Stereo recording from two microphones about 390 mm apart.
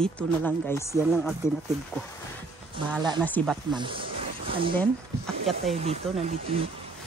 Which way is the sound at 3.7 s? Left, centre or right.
Centre.